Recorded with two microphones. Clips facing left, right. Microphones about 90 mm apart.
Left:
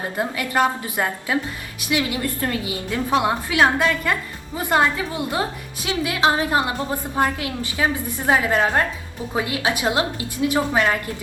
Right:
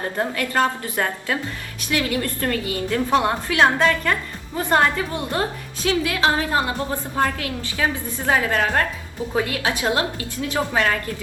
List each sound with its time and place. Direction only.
0.0 s a woman's voice: 15° left (ahead or behind)